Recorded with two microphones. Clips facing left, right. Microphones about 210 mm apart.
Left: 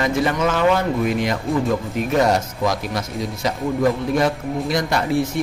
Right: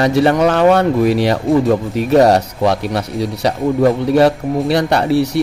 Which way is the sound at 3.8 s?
35° right (ahead or behind).